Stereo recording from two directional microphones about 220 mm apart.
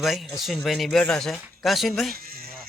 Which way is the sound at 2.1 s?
40° right (ahead or behind).